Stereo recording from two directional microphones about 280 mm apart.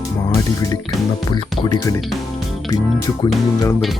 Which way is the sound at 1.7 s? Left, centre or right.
Centre.